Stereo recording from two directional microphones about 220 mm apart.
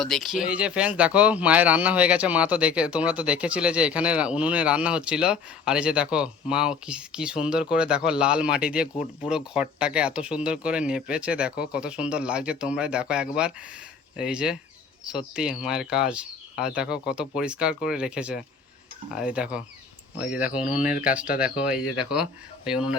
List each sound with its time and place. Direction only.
0.0 s speech: centre (ahead or behind)
20.5 s speech: 35° left (ahead or behind)
22.1 s speech: 5° right (ahead or behind)